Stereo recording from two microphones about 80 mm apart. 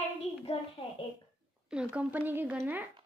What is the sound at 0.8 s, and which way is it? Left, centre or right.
Speech, left.